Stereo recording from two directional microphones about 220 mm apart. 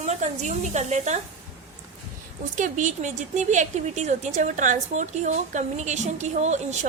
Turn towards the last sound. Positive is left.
turn(degrees=-30)  # may be behind; listen again after turning